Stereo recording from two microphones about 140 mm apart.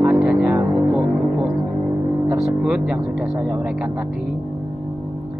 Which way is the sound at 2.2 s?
5° right (ahead or behind).